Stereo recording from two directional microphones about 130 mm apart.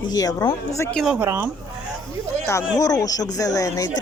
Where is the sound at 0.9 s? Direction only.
5° right (ahead or behind).